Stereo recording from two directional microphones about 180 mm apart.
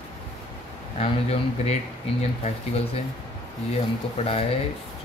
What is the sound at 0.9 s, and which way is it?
Speech, 35° left (ahead or behind).